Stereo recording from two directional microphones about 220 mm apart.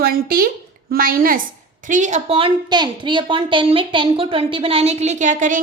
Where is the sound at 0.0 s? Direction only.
40° right (ahead or behind).